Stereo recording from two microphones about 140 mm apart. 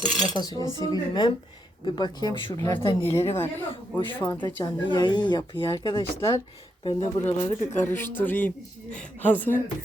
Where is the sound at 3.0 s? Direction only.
20° left (ahead or behind); by 6.1 s 40° left (ahead or behind).